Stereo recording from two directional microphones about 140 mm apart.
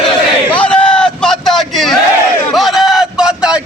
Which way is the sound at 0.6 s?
5° left (ahead or behind).